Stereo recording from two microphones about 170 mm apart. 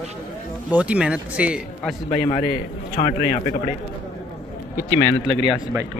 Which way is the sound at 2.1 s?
40° left (ahead or behind).